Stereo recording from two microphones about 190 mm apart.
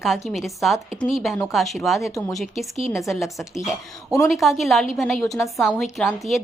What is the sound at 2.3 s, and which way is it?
A woman's voice, centre (ahead or behind).